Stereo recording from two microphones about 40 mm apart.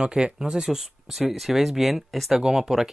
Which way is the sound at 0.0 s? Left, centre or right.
Centre.